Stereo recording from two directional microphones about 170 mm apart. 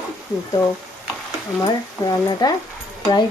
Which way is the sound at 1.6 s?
25° left (ahead or behind).